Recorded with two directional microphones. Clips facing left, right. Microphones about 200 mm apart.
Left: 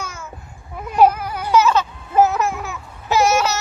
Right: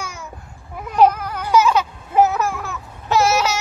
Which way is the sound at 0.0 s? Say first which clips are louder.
Even; 15° right (ahead or behind).